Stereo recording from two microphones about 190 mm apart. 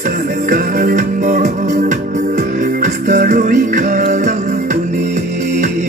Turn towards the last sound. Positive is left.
turn(degrees=-40)  # may be behind; listen again after turning